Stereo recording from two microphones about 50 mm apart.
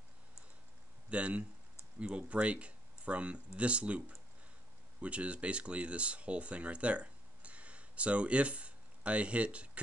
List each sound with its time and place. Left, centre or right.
1.1 s speech: right
5.0 s speech: right